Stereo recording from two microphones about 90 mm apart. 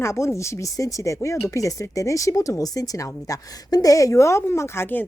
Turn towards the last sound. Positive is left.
turn(degrees=25)  # may be behind; listen again after turning